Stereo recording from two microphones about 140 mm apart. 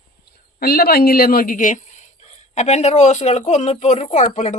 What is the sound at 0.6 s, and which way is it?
Speech, 90° left.